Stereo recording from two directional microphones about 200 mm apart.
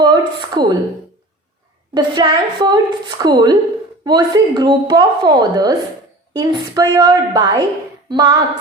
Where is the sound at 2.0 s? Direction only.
20° right (ahead or behind).